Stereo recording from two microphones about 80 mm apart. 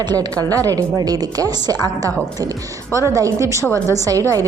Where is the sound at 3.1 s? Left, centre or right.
Right.